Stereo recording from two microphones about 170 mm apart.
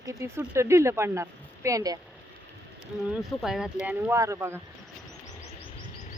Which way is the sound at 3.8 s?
15° right (ahead or behind).